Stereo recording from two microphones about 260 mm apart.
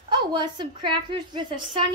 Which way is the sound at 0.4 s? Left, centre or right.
Centre.